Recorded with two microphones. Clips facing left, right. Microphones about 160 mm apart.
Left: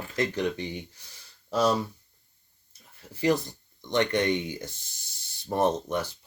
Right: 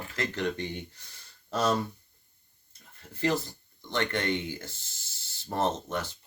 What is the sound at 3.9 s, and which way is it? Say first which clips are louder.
Speech: left 5 dB; 20° left (ahead or behind).